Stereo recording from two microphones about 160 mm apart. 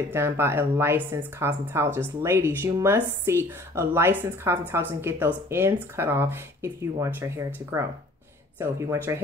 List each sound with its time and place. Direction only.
0.1 s speech: 15° right (ahead or behind)